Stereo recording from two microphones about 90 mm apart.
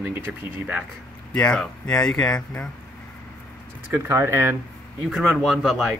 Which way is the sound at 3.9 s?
30° right (ahead or behind).